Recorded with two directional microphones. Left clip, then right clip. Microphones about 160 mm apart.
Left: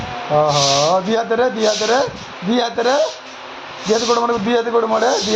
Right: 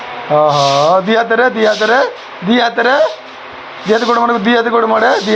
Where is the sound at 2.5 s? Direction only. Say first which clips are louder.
Right 5 dB; 35° right (ahead or behind).